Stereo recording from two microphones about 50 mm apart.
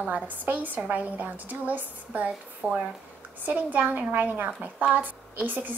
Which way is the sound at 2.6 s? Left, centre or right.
Right.